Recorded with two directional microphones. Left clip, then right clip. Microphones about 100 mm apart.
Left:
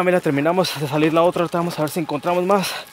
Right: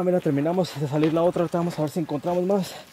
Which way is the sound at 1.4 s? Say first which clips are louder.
Left 4 dB; 10° left (ahead or behind).